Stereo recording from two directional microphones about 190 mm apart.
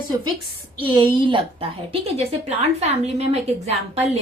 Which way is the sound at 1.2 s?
25° right (ahead or behind).